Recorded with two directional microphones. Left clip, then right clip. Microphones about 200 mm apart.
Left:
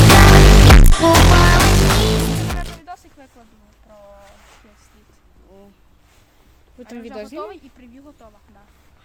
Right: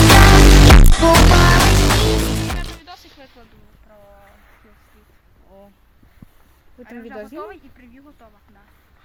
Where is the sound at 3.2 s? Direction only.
45° left (ahead or behind).